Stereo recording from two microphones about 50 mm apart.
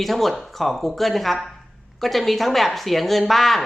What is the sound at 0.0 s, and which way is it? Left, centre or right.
A man's voice, centre.